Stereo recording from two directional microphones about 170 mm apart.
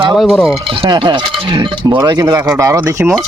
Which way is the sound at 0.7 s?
30° right (ahead or behind).